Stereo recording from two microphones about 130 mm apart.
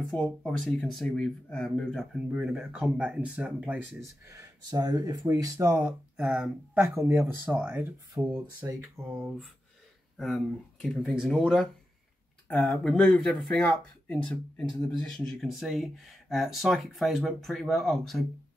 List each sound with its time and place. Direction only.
0.1 s speech: 5° left (ahead or behind)
4.3 s speech: 25° right (ahead or behind)
10.1 s speech: centre (ahead or behind)
12.4 s speech: 10° left (ahead or behind)